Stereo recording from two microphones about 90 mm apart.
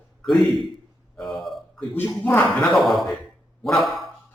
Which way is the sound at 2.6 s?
Centre (ahead or behind).